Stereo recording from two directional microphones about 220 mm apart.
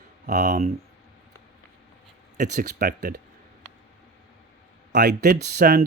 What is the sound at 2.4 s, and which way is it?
Speech, 40° right (ahead or behind).